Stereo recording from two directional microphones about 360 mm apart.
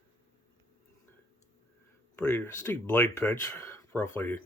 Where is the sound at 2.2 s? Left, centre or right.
Centre.